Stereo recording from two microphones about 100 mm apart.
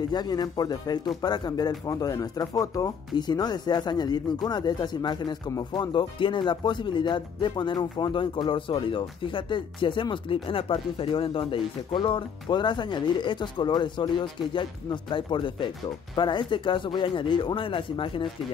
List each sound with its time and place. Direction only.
0.1 s speech: 45° left (ahead or behind)